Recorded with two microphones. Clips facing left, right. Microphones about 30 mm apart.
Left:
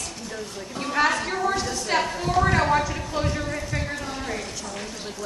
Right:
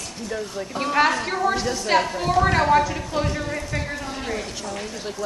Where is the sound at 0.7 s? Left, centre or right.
Centre.